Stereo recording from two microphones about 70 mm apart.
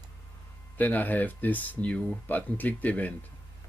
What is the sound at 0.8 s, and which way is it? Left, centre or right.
Speech, left.